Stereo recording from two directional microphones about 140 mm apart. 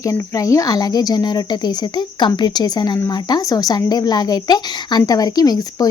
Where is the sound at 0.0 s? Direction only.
25° left (ahead or behind).